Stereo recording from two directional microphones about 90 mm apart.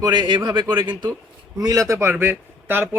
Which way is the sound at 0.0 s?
55° right (ahead or behind).